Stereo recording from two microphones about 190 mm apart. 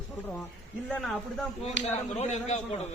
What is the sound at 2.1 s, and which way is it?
Speech, 35° left (ahead or behind).